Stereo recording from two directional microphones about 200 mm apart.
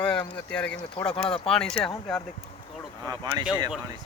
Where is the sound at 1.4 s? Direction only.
5° left (ahead or behind).